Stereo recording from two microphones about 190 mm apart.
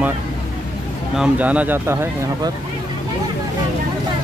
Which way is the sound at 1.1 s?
5° right (ahead or behind).